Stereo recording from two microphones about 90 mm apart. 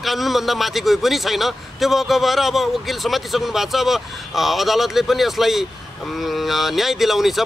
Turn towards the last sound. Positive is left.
turn(degrees=0)  # may be behind; listen again after turning